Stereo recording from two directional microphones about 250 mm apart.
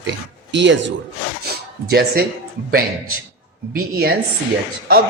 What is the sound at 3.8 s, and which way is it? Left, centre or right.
Speech, right.